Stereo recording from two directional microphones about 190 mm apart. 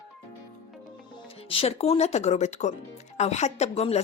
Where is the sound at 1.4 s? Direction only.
30° left (ahead or behind).